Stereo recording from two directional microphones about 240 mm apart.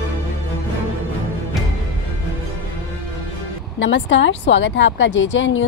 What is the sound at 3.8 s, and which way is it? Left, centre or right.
Speech, left.